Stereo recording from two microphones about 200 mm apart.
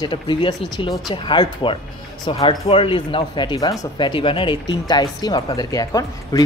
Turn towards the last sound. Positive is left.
turn(degrees=20)  # may be behind; listen again after turning